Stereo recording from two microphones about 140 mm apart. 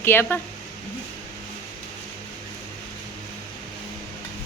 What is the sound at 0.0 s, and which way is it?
Speech, 15° left (ahead or behind).